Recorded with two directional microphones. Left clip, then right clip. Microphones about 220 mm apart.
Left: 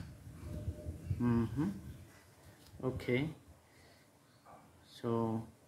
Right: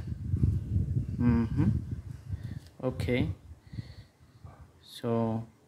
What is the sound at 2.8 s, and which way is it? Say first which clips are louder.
Speech: right 5 dB; 40° right (ahead or behind).